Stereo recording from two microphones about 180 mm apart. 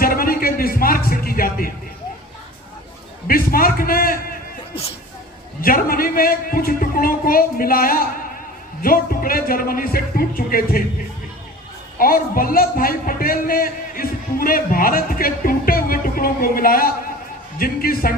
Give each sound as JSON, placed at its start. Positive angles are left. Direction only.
{"t": 0.0, "sound": "music", "side_deg": 55}
{"t": 3.2, "sound": "a sound", "side_deg": 55}
{"t": 5.6, "sound": "a man's voice", "side_deg": 55}
{"t": 11.9, "sound": "a man's voice", "side_deg": 50}